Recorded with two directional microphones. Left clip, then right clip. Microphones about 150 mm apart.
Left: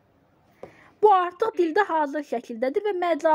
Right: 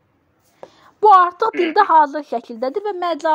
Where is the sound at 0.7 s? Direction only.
20° right (ahead or behind).